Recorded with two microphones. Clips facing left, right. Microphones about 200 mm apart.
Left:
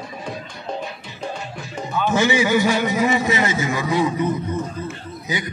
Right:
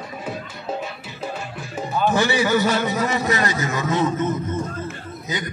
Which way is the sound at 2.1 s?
15° left (ahead or behind).